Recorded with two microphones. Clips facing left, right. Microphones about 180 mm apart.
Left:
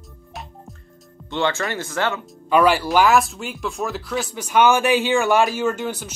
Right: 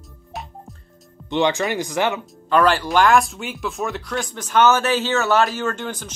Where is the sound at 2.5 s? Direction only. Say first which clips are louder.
Left 1 dB; 10° left (ahead or behind).